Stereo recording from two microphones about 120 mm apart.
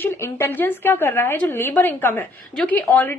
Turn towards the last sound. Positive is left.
turn(degrees=15)  # may be behind; listen again after turning